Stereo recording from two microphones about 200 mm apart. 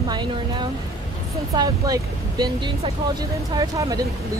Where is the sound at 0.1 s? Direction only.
20° right (ahead or behind).